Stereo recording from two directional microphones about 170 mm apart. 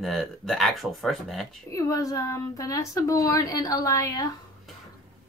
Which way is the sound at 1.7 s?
20° left (ahead or behind).